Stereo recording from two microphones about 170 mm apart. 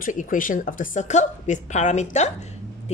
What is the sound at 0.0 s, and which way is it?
A woman's voice, 50° left (ahead or behind).